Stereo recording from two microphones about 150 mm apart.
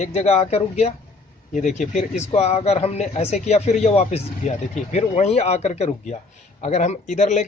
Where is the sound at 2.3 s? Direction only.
45° left (ahead or behind).